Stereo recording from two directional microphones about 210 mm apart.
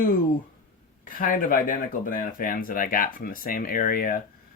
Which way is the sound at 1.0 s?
40° left (ahead or behind).